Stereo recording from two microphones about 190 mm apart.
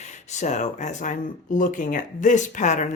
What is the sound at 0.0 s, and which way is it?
Speech, 35° left (ahead or behind).